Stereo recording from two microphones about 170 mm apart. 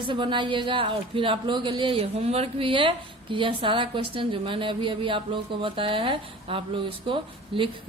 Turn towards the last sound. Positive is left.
turn(degrees=-30)  # may be behind; listen again after turning